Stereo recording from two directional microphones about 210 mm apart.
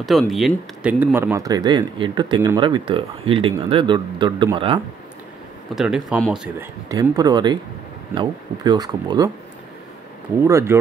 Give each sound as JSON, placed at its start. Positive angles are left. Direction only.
{"t": 0.0, "sound": "speech", "side_deg": 0}
{"t": 5.8, "sound": "speech", "side_deg": -5}
{"t": 6.9, "sound": "speech", "side_deg": -15}
{"t": 10.4, "sound": "speech", "side_deg": -10}